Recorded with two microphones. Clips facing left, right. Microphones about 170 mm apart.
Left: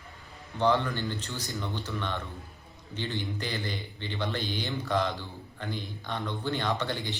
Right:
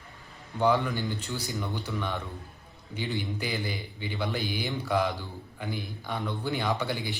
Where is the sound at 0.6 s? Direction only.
10° right (ahead or behind).